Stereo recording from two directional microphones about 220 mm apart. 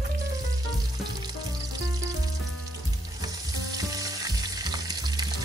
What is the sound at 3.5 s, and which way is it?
Frying, 15° right (ahead or behind).